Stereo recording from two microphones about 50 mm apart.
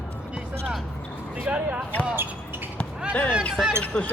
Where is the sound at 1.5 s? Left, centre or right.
Right.